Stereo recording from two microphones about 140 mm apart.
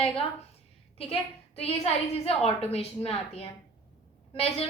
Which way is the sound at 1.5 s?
45° left (ahead or behind).